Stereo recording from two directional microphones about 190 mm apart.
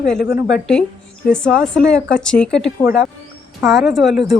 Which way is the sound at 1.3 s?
5° left (ahead or behind).